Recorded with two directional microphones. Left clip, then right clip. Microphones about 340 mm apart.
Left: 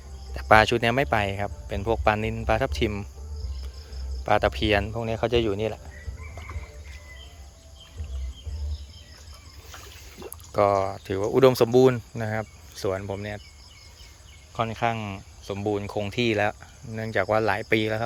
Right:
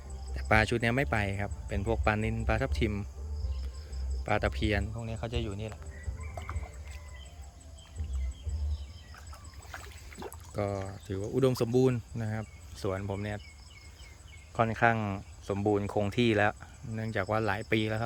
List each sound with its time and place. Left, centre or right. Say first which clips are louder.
0.3 s speech: left 9 dB; centre
4.3 s speech: left 9 dB; centre
9.7 s a sound: left 1 dB; centre
10.5 s speech: left 14 dB; centre
14.5 s speech: even; centre